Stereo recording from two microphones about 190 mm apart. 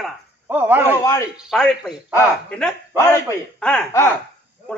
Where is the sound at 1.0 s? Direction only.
15° left (ahead or behind).